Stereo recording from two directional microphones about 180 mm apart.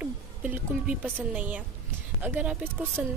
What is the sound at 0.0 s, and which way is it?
A woman's voice, 5° right (ahead or behind).